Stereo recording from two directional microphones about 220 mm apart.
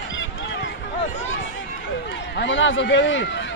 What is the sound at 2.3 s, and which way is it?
Speech, 55° left (ahead or behind).